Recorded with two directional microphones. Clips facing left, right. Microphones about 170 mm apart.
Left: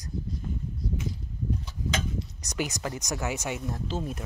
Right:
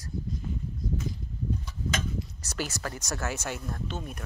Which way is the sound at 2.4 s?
15° left (ahead or behind).